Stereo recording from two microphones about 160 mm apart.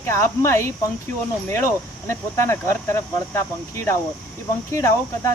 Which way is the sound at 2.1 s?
15° left (ahead or behind).